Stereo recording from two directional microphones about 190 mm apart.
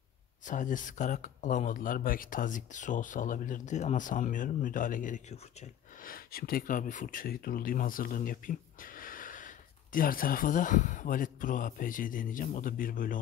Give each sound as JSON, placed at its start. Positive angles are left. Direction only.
{"t": 0.5, "sound": "speech", "side_deg": 45}